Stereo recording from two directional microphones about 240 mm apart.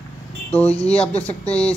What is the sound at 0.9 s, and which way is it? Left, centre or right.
Speech, left.